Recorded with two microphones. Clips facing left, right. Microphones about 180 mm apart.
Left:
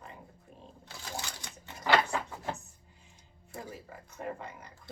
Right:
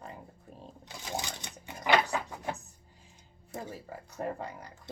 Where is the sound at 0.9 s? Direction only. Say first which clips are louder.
Right 4 dB; 20° right (ahead or behind).